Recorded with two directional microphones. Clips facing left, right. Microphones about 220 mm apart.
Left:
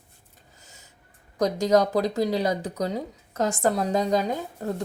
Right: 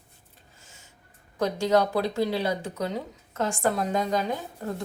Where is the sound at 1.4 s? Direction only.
40° left (ahead or behind).